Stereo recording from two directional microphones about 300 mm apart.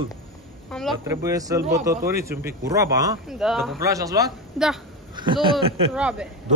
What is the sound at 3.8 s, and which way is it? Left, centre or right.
Speech, centre.